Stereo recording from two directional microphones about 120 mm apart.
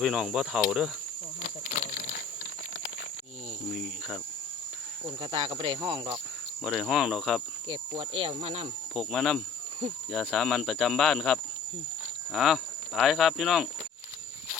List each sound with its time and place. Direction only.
0.0 s speech: centre (ahead or behind)
1.7 s a sound: 90° left
3.7 s cricket: centre (ahead or behind)
5.2 s speech: 50° right (ahead or behind)
6.7 s speech: centre (ahead or behind)
7.7 s speech: 45° right (ahead or behind)
9.0 s speech: 5° left (ahead or behind)